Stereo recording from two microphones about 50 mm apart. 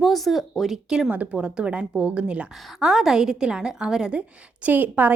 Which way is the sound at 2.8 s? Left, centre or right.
Centre.